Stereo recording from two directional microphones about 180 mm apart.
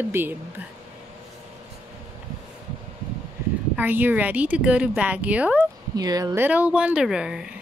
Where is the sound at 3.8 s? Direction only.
10° right (ahead or behind).